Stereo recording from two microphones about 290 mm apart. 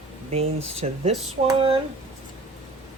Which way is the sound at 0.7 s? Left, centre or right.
Right.